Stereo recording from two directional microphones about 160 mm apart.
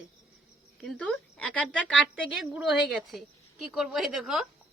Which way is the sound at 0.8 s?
5° left (ahead or behind).